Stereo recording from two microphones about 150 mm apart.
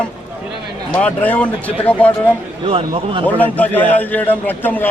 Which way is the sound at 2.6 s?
35° right (ahead or behind).